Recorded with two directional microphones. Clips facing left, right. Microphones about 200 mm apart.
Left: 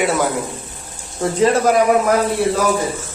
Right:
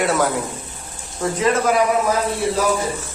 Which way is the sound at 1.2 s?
30° left (ahead or behind).